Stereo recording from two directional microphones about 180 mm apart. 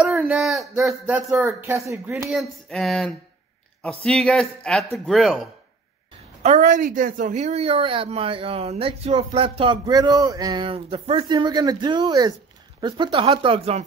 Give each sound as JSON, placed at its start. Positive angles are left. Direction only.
{"t": 0.0, "sound": "speech", "side_deg": -5}
{"t": 2.2, "sound": "speech", "side_deg": 0}
{"t": 6.4, "sound": "a woman's voice", "side_deg": -40}